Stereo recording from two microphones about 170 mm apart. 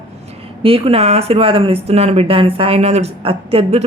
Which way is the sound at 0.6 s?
35° right (ahead or behind).